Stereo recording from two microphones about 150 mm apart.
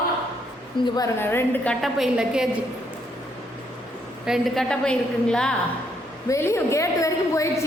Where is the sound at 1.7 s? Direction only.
Centre (ahead or behind).